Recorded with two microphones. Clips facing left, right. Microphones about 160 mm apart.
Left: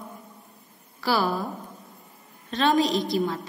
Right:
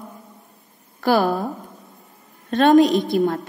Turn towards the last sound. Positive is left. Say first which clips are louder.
# right 6 dB
turn(degrees=-55)  # may be behind; listen again after turning